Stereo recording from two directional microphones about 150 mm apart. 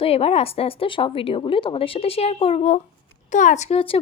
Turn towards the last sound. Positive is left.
turn(degrees=40)  # may be behind; listen again after turning